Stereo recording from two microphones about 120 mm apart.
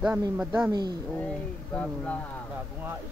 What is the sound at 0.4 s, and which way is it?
Speech, 10° right (ahead or behind).